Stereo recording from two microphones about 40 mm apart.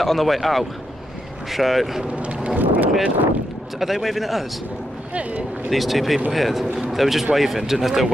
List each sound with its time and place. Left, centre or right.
0.0 s speech: centre
2.1 s vehicle: right
2.6 s a sound: right
3.8 s speech: centre
5.7 s speech: centre